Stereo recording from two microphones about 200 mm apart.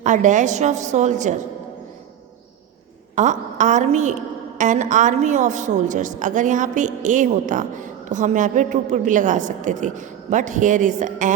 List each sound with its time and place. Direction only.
0.0 s a woman's voice: 40° right (ahead or behind)
3.2 s a woman's voice: 40° right (ahead or behind)